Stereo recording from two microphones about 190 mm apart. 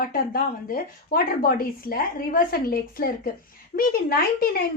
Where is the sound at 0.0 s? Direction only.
50° left (ahead or behind).